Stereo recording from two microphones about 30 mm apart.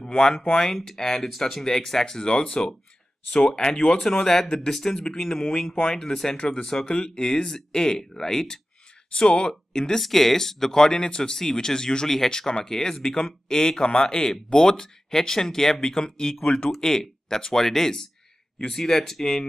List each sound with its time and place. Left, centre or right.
0.0 s speech: left
0.8 s speech: centre
1.6 s speech: centre
4.1 s speech: centre
4.8 s speech: left
5.1 s speech: centre
9.1 s speech: left
10.0 s speech: centre; by 16.3 s left
16.8 s speech: centre